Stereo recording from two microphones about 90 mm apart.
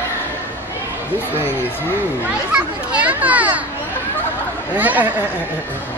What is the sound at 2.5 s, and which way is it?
Children playing, 15° right (ahead or behind).